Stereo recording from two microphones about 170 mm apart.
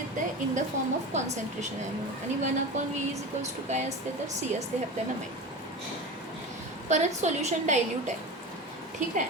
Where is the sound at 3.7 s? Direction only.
40° right (ahead or behind).